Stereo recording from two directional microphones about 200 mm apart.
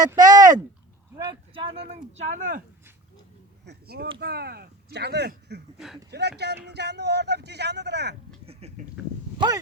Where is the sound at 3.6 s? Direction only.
50° right (ahead or behind).